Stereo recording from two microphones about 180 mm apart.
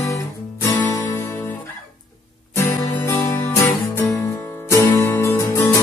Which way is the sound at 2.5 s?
15° left (ahead or behind).